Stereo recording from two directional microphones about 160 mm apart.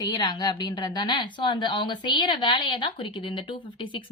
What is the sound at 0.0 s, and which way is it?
A woman's voice, 25° left (ahead or behind).